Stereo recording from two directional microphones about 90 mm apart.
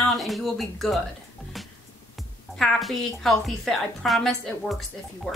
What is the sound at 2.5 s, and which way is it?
A woman's voice, 5° left (ahead or behind).